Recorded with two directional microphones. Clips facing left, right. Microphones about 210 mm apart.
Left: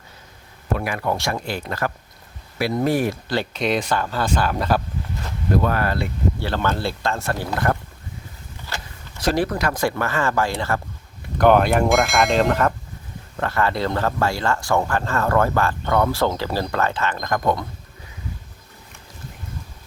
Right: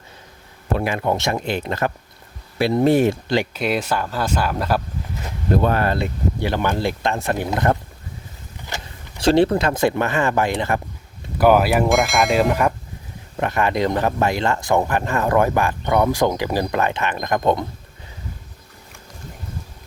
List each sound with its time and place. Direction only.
0.8 s speech: 25° right (ahead or behind)
3.5 s speech: 5° right (ahead or behind)
5.5 s speech: 25° right (ahead or behind)
11.3 s speech: 5° right (ahead or behind); by 17.7 s 20° right (ahead or behind)